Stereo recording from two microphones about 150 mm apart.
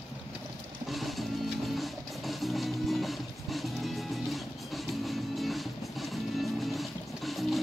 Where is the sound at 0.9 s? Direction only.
Centre (ahead or behind).